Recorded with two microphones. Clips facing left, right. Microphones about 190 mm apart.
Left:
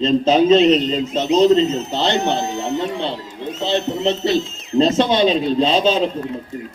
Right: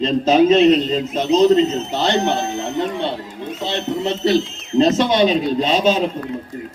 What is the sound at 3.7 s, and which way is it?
A man's voice, 30° left (ahead or behind).